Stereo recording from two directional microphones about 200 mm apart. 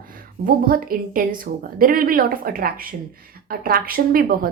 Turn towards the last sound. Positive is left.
turn(degrees=-45)  # may be behind; listen again after turning